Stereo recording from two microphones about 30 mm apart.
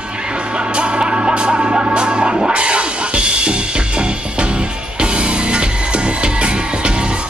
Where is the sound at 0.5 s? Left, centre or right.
Right.